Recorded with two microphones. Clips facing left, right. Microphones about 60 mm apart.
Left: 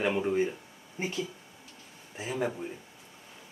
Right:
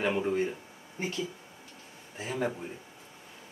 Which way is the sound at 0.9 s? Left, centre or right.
Centre.